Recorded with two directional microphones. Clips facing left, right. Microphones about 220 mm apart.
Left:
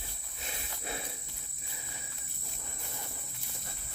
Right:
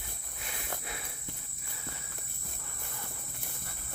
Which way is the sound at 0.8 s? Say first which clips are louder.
Left 4 dB; 30° left (ahead or behind).